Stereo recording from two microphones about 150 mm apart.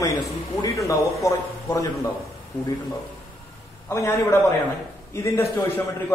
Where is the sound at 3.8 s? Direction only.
20° left (ahead or behind).